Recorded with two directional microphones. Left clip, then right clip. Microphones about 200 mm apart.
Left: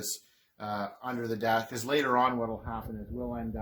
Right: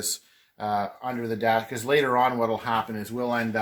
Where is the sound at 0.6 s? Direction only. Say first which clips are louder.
Right 8 dB; 30° right (ahead or behind).